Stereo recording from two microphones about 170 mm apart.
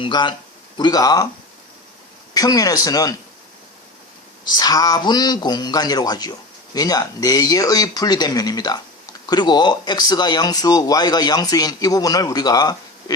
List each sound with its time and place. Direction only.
0.0 s speech: 25° left (ahead or behind)
2.3 s speech: 20° left (ahead or behind)
4.4 s speech: 25° left (ahead or behind)